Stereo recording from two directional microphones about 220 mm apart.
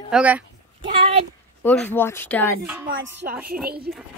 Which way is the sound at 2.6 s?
5° right (ahead or behind).